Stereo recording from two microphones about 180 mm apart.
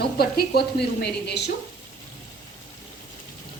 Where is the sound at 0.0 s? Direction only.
60° left (ahead or behind).